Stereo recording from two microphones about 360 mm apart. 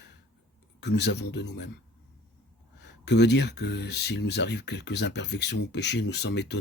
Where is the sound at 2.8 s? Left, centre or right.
Left.